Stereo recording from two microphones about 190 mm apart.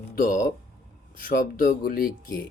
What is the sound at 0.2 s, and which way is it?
Speech, 45° left (ahead or behind).